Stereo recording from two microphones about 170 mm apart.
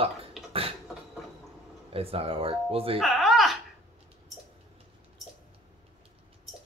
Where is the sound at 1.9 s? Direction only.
35° right (ahead or behind).